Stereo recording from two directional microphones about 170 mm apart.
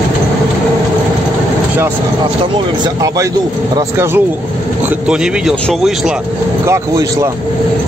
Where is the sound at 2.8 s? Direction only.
20° right (ahead or behind).